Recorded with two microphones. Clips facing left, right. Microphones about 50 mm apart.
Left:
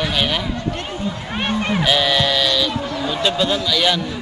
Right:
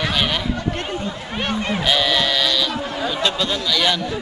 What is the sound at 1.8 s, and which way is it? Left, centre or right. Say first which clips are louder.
A man's voice: left 1 dB; centre.